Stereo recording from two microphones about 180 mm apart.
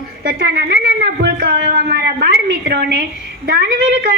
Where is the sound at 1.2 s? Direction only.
55° right (ahead or behind).